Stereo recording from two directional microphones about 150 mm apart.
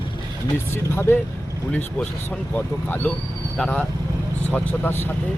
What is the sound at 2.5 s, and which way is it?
Speech, 10° left (ahead or behind).